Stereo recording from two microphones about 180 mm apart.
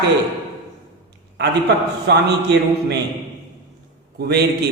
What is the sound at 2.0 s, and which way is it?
Speech, 70° right (ahead or behind).